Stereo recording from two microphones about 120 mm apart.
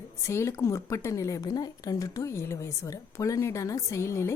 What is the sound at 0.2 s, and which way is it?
A woman's voice, 25° left (ahead or behind).